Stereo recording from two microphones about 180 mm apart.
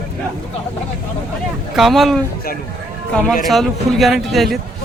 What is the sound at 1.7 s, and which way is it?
Speech, centre (ahead or behind).